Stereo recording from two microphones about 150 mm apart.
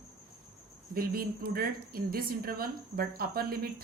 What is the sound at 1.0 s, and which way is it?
A woman's voice, 80° right.